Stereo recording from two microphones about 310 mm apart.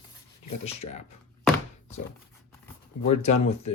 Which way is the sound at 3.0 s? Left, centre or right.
Left.